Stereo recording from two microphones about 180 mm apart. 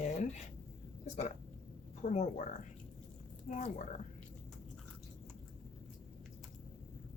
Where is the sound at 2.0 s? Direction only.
45° left (ahead or behind).